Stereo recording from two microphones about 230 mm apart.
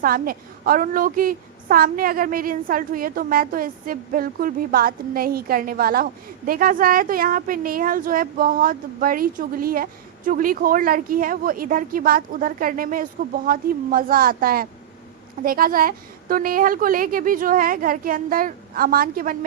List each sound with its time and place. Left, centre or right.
0.0 s a woman's voice: right